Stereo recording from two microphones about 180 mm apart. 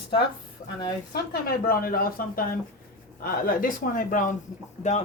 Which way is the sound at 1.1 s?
55° left (ahead or behind).